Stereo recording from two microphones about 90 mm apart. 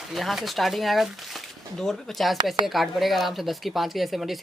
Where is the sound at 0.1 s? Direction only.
Centre (ahead or behind).